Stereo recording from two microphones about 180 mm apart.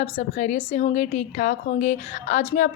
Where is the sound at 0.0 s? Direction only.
45° left (ahead or behind).